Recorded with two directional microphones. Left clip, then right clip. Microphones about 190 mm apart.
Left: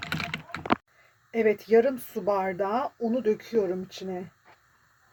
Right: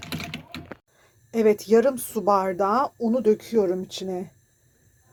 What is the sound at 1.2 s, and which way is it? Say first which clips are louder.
Speech: right 4 dB; 25° right (ahead or behind).